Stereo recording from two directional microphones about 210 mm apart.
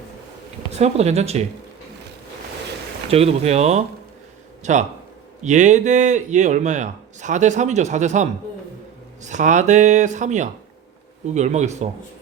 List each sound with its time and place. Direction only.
0.7 s speech: 30° right (ahead or behind)
3.1 s speech: 30° right (ahead or behind)